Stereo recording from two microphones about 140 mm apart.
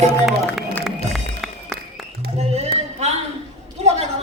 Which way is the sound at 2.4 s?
50° right (ahead or behind).